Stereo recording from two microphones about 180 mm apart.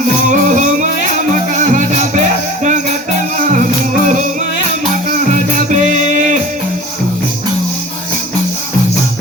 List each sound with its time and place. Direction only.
0.3 s music: 45° right (ahead or behind)
5.3 s music: 45° right (ahead or behind)